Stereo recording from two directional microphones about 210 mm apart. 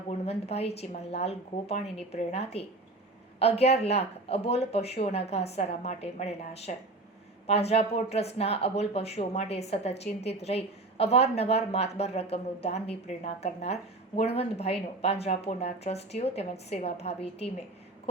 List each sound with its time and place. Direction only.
0.1 s a woman's voice: 30° left (ahead or behind)